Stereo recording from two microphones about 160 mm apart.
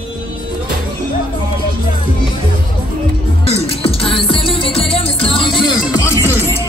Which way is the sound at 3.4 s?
40° left (ahead or behind).